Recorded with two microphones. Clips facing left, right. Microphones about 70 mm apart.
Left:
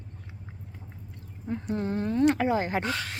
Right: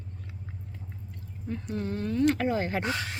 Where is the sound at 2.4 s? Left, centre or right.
Centre.